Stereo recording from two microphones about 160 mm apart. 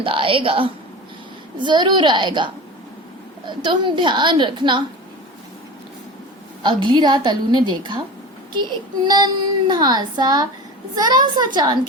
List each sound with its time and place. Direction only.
0.0 s a woman's voice: 35° right (ahead or behind)
6.6 s speech: 30° right (ahead or behind)
9.0 s speech: 30° right (ahead or behind)